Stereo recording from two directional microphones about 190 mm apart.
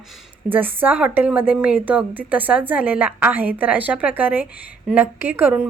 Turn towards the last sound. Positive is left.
turn(degrees=-10)  # may be behind; listen again after turning